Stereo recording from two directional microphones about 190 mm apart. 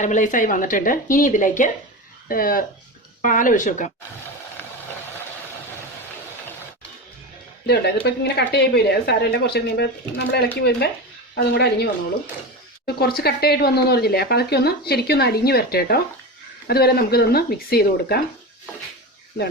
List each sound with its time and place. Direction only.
0.0 s speech: 40° left (ahead or behind)
7.7 s speech: 60° left (ahead or behind)